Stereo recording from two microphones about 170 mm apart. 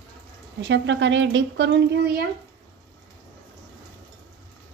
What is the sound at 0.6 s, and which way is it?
Speech, 90° right.